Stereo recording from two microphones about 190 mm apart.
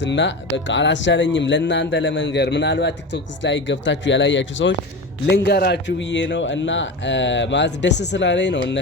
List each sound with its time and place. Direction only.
0.0 s speech: 70° left (ahead or behind)
5.2 s speech: 60° left (ahead or behind)